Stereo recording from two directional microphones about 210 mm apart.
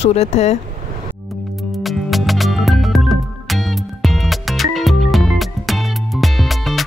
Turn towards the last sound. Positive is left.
turn(degrees=0)  # may be behind; listen again after turning